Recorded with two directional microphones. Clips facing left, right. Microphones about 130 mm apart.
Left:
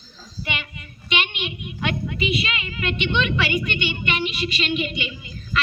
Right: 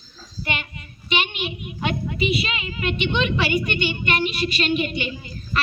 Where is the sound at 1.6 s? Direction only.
35° right (ahead or behind).